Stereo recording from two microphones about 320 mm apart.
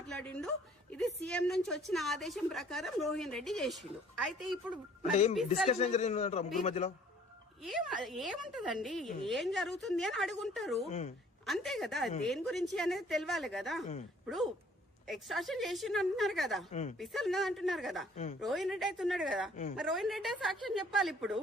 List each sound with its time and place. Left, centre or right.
0.2 s a woman's voice: centre
5.1 s a man's voice: left
7.6 s a woman's voice: centre